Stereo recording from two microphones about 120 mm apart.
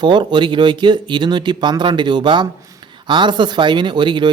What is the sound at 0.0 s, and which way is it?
Speech, 40° right (ahead or behind).